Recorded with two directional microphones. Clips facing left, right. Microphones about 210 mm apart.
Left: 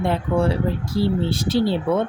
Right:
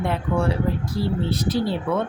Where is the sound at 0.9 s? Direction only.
30° left (ahead or behind).